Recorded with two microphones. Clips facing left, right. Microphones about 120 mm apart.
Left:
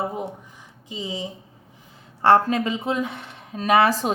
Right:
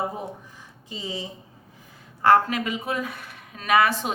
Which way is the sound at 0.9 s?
20° left (ahead or behind).